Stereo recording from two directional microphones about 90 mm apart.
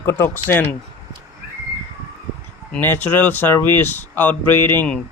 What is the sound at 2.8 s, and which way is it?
Speech, 20° left (ahead or behind).